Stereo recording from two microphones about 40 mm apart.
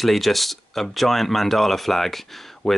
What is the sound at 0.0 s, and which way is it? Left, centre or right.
Speech, centre.